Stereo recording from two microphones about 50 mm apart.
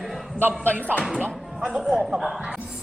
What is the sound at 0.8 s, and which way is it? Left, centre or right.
Speech, left.